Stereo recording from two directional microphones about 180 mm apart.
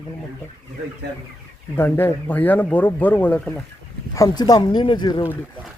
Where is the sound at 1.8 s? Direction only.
10° left (ahead or behind).